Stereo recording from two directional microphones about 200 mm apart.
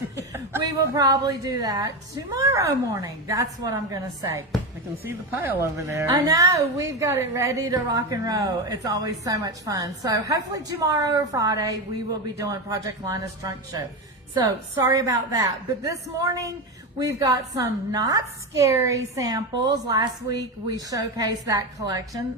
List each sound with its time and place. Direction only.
0.3 s a woman's voice: 15° right (ahead or behind)